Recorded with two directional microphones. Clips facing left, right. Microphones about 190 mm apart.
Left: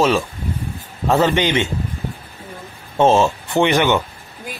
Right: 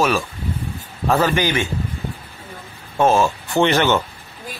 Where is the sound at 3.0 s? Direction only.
25° left (ahead or behind).